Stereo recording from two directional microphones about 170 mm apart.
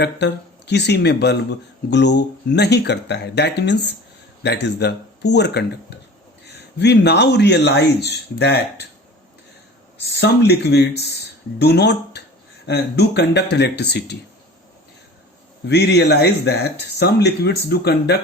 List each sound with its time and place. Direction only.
0.0 s speech: 80° left
1.9 s speech: 90° left
6.7 s speech: 80° left
10.0 s speech: 75° left (ahead or behind)
15.6 s speech: 85° left